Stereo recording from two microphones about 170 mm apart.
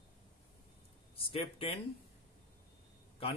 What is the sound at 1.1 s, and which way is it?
Speech, 30° left (ahead or behind).